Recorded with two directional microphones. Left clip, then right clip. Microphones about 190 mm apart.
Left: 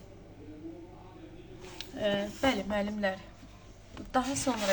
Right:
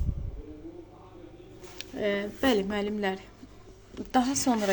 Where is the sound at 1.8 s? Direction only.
20° right (ahead or behind).